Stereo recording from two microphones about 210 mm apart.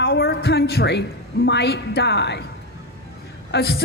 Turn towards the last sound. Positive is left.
turn(degrees=50)  # may be behind; listen again after turning